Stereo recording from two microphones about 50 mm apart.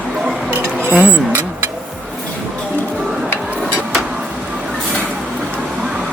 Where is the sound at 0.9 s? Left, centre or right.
Right.